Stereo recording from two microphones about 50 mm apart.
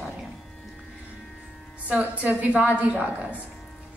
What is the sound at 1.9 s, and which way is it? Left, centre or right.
A woman's voice, right.